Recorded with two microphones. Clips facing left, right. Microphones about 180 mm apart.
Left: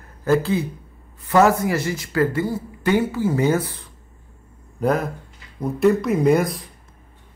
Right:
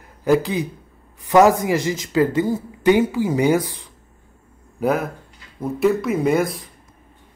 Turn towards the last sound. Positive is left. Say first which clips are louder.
# left 1 dB
turn(degrees=0)  # may be behind; listen again after turning